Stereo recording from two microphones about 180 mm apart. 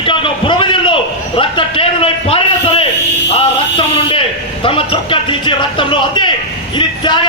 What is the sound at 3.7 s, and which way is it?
A man's voice, 30° left (ahead or behind).